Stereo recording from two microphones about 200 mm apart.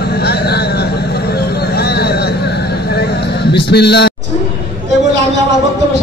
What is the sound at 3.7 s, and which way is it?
Speech, 55° left (ahead or behind).